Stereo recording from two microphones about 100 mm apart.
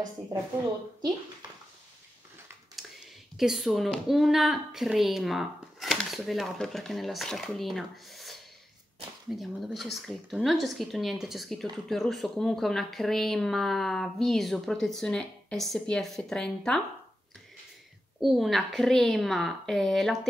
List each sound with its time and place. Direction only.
3.3 s a woman's voice: centre (ahead or behind)
18.2 s a woman's voice: centre (ahead or behind)